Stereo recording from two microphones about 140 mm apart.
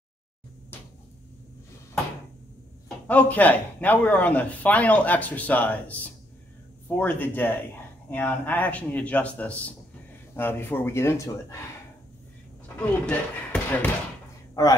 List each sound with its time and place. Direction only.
3.1 s speech: 10° left (ahead or behind)
7.0 s speech: 15° left (ahead or behind)
13.0 s speech: 10° left (ahead or behind)
14.5 s a sound: 25° left (ahead or behind)